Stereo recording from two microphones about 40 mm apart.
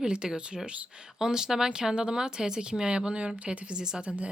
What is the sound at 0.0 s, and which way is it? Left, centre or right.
Speech, centre.